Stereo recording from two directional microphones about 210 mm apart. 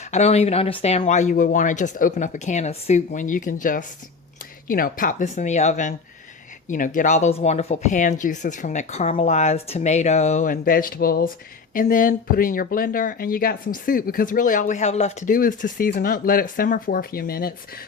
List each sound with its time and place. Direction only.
0.0 s speech: 30° left (ahead or behind)